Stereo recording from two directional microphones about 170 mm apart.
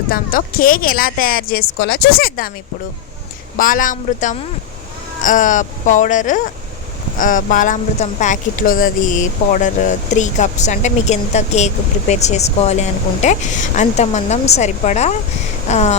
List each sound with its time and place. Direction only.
0.1 s speech: 60° left (ahead or behind)
3.6 s speech: 50° left (ahead or behind)